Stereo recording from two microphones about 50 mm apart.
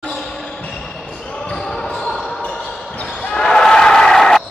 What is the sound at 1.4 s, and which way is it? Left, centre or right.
Basketball bounce, centre.